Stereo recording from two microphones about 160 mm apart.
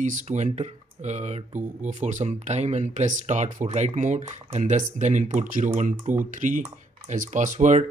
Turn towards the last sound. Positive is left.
turn(degrees=-50)  # may be behind; listen again after turning